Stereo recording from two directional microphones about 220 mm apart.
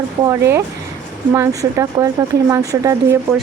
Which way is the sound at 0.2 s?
15° right (ahead or behind).